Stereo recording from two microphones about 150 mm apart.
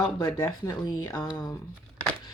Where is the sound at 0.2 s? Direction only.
20° left (ahead or behind).